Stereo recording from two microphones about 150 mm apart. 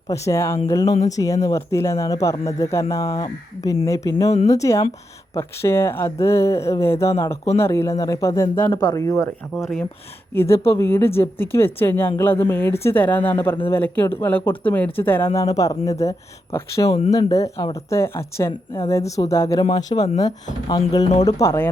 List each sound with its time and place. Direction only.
0.1 s a woman's voice: 20° left (ahead or behind)
4.3 s speech: 45° left (ahead or behind)
4.5 s a woman's voice: 20° left (ahead or behind)
8.7 s a woman's voice: 30° left (ahead or behind)